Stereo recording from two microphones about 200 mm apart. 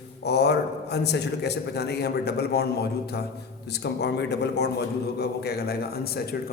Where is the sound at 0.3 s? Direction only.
55° left (ahead or behind).